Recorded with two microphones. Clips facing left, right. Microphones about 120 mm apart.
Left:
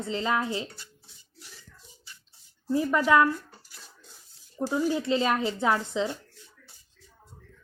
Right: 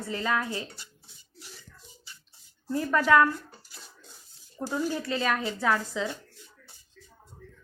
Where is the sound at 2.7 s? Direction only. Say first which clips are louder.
Even; 15° left (ahead or behind).